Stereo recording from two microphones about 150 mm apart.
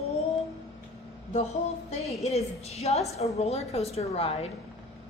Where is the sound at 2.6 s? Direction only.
45° left (ahead or behind).